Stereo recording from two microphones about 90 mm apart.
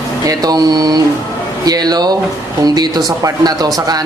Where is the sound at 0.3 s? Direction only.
45° right (ahead or behind).